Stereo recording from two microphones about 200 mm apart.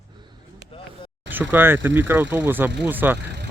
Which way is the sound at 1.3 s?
10° right (ahead or behind).